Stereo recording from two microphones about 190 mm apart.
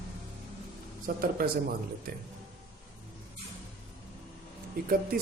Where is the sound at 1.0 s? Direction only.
50° right (ahead or behind).